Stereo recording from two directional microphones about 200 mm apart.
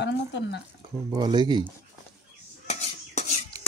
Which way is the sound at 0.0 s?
60° left (ahead or behind).